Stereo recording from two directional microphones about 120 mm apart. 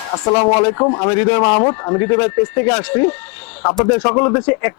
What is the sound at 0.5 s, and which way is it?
Speech, 25° left (ahead or behind).